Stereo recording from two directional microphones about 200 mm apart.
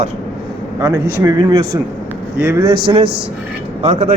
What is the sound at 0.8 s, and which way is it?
A man's voice, 15° right (ahead or behind).